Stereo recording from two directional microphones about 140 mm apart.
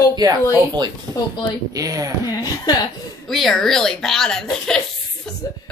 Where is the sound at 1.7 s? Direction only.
25° right (ahead or behind).